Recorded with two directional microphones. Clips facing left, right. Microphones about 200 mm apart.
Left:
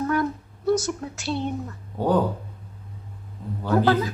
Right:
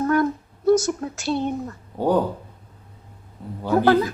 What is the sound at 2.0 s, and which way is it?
Speech, 15° right (ahead or behind).